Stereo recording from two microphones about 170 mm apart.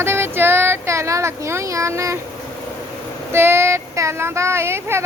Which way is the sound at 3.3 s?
15° right (ahead or behind).